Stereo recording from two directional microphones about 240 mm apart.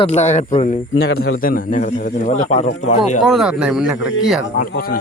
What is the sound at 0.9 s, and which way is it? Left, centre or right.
A man's voice, left.